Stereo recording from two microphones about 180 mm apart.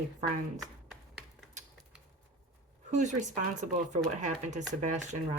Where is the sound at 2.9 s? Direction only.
45° right (ahead or behind).